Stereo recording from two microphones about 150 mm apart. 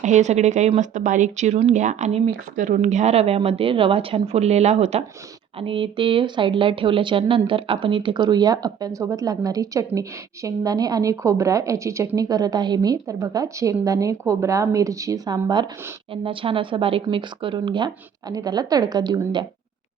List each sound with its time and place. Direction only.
0.0 s speech: 50° right (ahead or behind); by 19.2 s 25° right (ahead or behind)